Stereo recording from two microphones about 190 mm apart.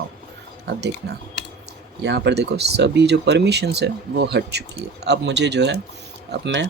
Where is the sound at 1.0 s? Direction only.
60° right (ahead or behind).